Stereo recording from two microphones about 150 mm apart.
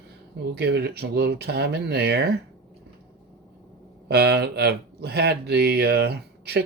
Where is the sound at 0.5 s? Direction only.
90° right.